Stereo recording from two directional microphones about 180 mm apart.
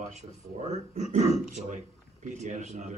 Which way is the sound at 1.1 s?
40° right (ahead or behind).